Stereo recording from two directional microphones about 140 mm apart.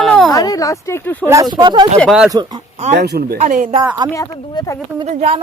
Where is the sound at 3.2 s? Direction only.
70° right (ahead or behind).